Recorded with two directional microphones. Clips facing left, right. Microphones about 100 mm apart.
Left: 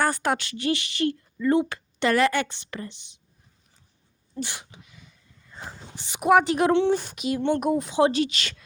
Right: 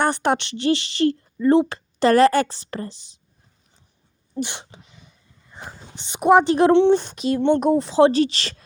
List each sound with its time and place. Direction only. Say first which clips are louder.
0.0 s speech: right 4 dB; 25° right (ahead or behind)
4.4 s speech: right 5 dB; 25° right (ahead or behind)